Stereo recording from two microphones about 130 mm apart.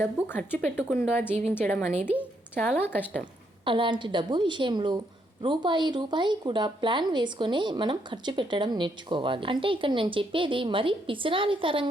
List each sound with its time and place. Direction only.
0.0 s speech: 15° left (ahead or behind)
3.6 s speech: 40° right (ahead or behind)